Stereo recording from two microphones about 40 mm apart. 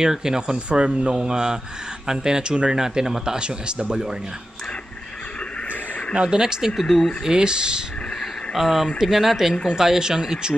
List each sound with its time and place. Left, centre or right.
0.0 s speech: centre
6.2 s speech: centre
6.8 s speech: centre
7.2 s speech: right
8.5 s speech: centre